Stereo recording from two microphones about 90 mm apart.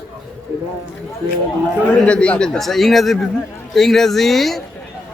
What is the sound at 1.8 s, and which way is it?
A man's voice, 15° left (ahead or behind).